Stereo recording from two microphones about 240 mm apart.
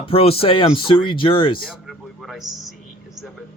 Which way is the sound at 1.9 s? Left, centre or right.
Centre.